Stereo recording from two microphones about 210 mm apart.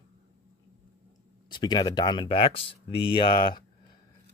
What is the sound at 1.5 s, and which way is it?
Speech, 20° left (ahead or behind).